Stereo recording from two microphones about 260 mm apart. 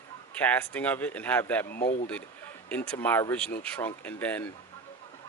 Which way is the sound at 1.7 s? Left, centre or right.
Left.